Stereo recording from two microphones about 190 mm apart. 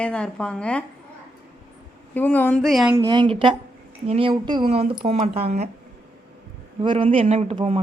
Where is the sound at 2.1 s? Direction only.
10° left (ahead or behind).